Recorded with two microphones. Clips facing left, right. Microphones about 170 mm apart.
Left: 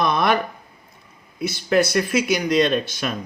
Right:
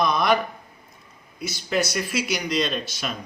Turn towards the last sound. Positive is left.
turn(degrees=55)  # may be behind; listen again after turning